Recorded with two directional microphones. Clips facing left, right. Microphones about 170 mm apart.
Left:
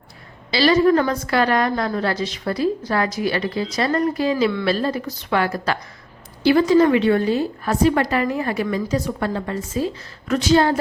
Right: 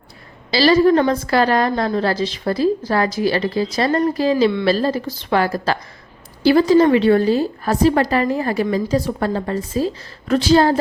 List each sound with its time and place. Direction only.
0.5 s a woman's voice: 35° right (ahead or behind)